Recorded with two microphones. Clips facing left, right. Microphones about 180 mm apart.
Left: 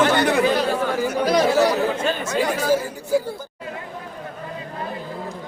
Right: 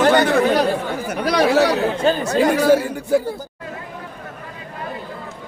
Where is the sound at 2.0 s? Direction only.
35° right (ahead or behind).